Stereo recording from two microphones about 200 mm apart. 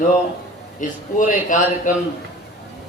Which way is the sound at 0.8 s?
40° left (ahead or behind).